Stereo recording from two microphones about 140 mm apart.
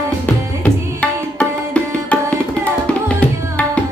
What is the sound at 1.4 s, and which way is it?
Music, 10° left (ahead or behind).